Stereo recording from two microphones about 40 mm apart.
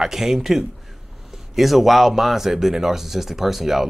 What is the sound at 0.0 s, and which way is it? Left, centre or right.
Speech, centre.